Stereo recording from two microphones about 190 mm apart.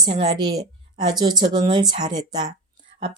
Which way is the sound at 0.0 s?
25° right (ahead or behind).